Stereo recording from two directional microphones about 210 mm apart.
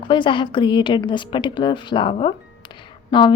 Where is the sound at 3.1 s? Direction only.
20° left (ahead or behind).